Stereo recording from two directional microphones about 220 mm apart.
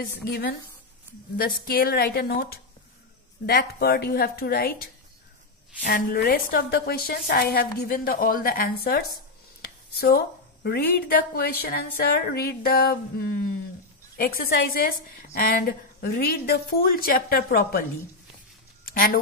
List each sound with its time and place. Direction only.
0.2 s speech: 45° left (ahead or behind)
5.9 s speech: 45° left (ahead or behind)
18.9 s speech: 40° left (ahead or behind)